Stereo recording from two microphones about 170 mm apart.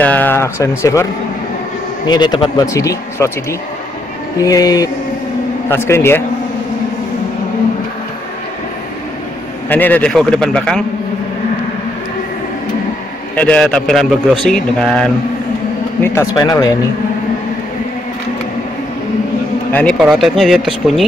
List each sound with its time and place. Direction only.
0.0 s speech: 10° left (ahead or behind)
2.0 s speech: 25° left (ahead or behind)
4.4 s speech: 20° left (ahead or behind)
9.7 s speech: 10° left (ahead or behind)
13.4 s speech: 5° left (ahead or behind)
16.0 s speech: 20° left (ahead or behind)
19.7 s speech: 5° left (ahead or behind)